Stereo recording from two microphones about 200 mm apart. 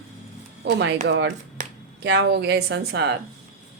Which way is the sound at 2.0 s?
60° right (ahead or behind).